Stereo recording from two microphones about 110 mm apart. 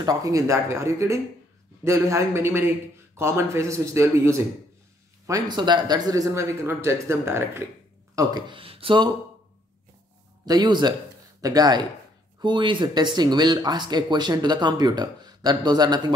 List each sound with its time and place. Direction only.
0.0 s speech: 30° right (ahead or behind)
8.2 s speech: 35° right (ahead or behind)
8.5 s speech: 55° right (ahead or behind)
10.4 s speech: 40° right (ahead or behind)